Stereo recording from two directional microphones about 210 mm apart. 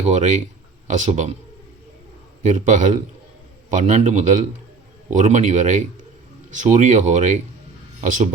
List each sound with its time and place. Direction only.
0.0 s speech: 35° right (ahead or behind)
2.4 s speech: 35° right (ahead or behind)